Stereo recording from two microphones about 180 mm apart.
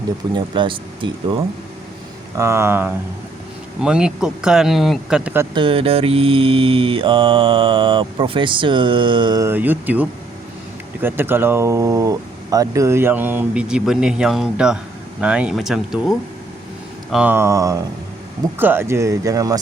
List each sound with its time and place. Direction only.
0.3 s mantra: 25° right (ahead or behind)
2.3 s speech: 15° right (ahead or behind)
5.5 s mantra: 30° right (ahead or behind); by 10.1 s 10° right (ahead or behind)
11.0 s speech: 10° right (ahead or behind)